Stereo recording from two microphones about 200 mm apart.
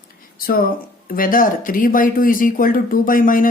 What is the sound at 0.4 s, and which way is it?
Speech, 45° left (ahead or behind).